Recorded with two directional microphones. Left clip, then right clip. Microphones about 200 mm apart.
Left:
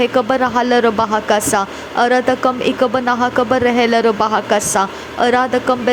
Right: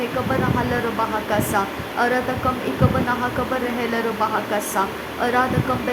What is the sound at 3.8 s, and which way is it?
A woman's voice, 35° left (ahead or behind).